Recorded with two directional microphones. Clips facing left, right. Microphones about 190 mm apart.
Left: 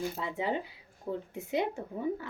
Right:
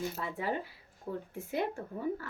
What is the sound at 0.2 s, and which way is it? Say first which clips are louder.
Speech: left 2 dB; 20° left (ahead or behind).